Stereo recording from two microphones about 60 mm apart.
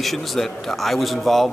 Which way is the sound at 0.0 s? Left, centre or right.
Centre.